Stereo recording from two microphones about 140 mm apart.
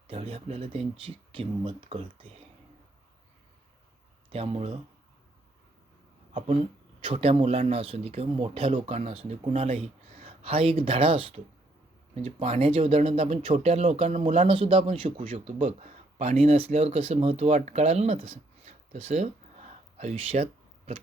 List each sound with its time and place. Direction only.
0.1 s speech: 40° right (ahead or behind)
4.3 s a man's voice: 45° right (ahead or behind)
7.0 s a man's voice: 45° right (ahead or behind)
9.0 s a man's voice: 55° right (ahead or behind)
14.3 s a man's voice: 40° right (ahead or behind)